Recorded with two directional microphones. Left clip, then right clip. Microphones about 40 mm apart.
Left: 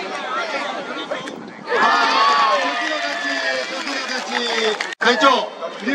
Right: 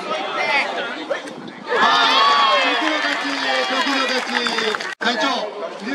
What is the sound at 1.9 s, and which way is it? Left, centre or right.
Crowd, right.